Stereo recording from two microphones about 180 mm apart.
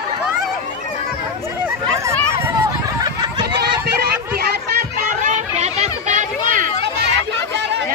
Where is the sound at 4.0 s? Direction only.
60° right (ahead or behind).